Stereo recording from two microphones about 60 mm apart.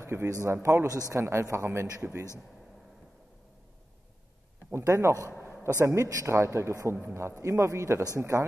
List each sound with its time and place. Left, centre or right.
0.0 s speech: right
0.3 s a man's voice: right
4.7 s a man's voice: right
6.2 s a man's voice: right